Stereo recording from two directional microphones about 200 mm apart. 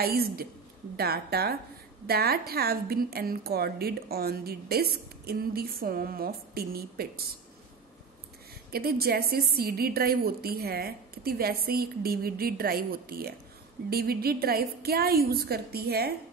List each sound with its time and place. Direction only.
0.0 s a woman's voice: 50° right (ahead or behind)
8.7 s a woman's voice: 50° right (ahead or behind)